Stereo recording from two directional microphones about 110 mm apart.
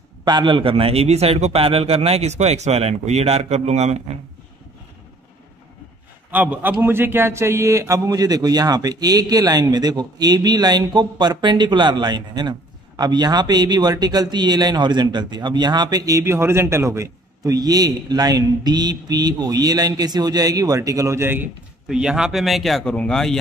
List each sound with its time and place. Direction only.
0.2 s a man's voice: 40° right (ahead or behind); by 4.0 s 90° right
6.3 s a man's voice: 15° right (ahead or behind)
21.8 s speech: 5° right (ahead or behind)